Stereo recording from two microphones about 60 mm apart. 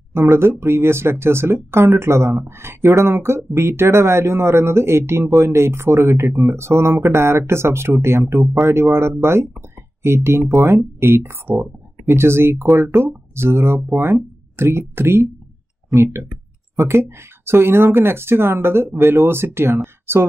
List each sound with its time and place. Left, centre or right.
0.1 s speech: right
15.9 s speech: right